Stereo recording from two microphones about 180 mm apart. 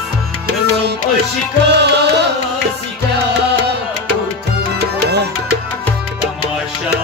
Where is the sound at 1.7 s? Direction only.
70° right (ahead or behind).